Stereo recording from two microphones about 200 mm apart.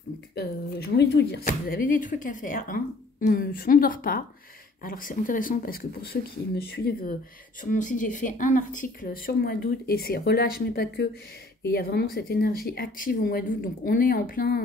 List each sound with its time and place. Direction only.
0.3 s speech: 50° left (ahead or behind)